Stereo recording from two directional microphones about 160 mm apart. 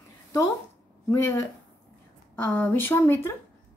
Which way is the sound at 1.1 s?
15° left (ahead or behind).